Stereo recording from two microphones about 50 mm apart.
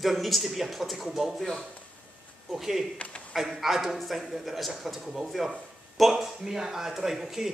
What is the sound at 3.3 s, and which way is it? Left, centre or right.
Speech, centre.